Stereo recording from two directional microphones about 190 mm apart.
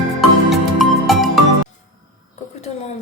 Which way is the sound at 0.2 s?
Centre (ahead or behind).